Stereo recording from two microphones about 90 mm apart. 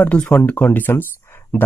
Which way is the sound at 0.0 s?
15° left (ahead or behind).